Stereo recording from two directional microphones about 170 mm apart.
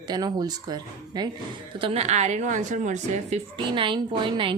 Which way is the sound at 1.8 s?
35° right (ahead or behind).